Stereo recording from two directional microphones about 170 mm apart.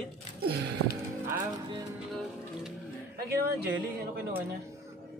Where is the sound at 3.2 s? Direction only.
65° right (ahead or behind).